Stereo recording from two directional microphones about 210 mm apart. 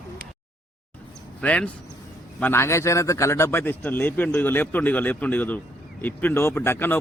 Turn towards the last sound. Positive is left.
turn(degrees=10)  # may be behind; listen again after turning